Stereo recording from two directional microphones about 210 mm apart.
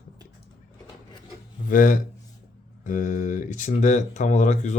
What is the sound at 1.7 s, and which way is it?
Speech, 40° left (ahead or behind).